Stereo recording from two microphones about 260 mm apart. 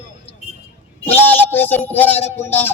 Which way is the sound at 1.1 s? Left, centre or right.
Centre.